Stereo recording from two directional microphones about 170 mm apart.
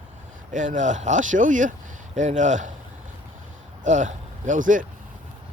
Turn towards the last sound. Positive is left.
turn(degrees=-50)  # may be behind; listen again after turning